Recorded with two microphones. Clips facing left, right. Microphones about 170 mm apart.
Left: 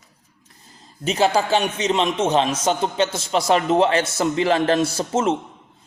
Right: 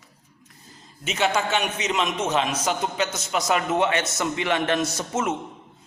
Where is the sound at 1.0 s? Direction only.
35° left (ahead or behind).